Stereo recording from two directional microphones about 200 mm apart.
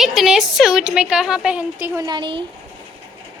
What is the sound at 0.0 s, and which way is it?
A woman's voice, centre (ahead or behind).